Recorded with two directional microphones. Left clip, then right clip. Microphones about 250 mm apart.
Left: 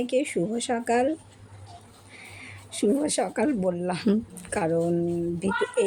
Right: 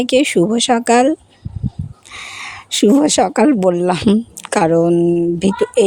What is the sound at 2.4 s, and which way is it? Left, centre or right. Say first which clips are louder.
Speech: right 12 dB; right.